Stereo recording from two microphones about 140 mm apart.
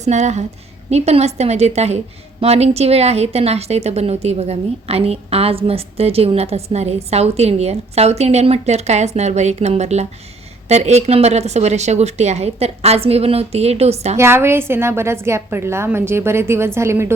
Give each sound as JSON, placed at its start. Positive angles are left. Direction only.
{"t": 0.0, "sound": "a woman's voice", "side_deg": -55}
{"t": 14.2, "sound": "a woman's voice", "side_deg": -15}